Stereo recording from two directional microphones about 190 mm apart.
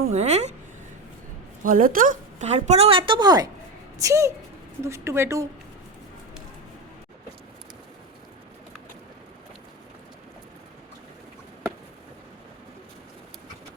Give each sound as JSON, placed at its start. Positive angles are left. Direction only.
{"t": 0.1, "sound": "a woman's voice", "side_deg": -35}
{"t": 1.6, "sound": "a woman's voice", "side_deg": -45}